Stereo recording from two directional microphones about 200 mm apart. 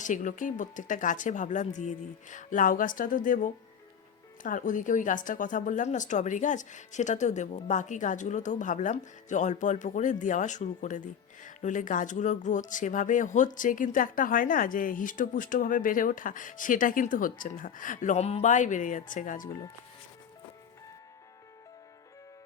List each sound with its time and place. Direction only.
0.0 s speech: 40° left (ahead or behind)